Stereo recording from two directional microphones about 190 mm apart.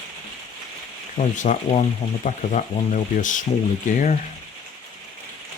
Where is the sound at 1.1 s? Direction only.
40° left (ahead or behind).